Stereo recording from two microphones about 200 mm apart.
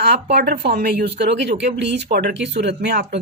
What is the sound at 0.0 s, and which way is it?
Speech, 55° right (ahead or behind).